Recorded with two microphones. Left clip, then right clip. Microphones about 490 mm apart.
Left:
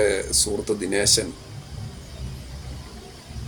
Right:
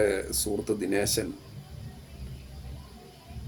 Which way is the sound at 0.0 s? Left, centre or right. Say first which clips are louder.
Left 5 dB; right.